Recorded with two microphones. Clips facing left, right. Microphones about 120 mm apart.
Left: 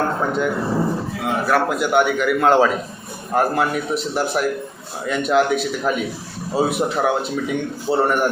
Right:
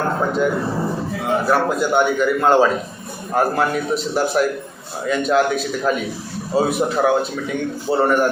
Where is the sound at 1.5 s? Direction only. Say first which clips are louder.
Left 3 dB; 10° left (ahead or behind).